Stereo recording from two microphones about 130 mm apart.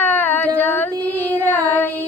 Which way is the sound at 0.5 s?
15° left (ahead or behind).